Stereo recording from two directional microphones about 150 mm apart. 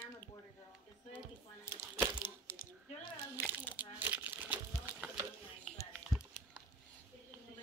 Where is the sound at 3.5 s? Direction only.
15° right (ahead or behind).